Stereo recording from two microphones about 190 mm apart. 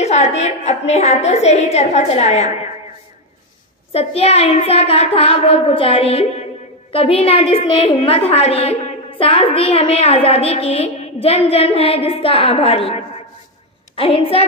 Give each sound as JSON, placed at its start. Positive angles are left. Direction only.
{"t": 0.0, "sound": "a woman's voice", "side_deg": 35}
{"t": 3.9, "sound": "a woman's voice", "side_deg": 30}